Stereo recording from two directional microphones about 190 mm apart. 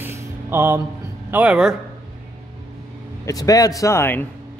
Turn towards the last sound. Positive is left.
turn(degrees=10)  # may be behind; listen again after turning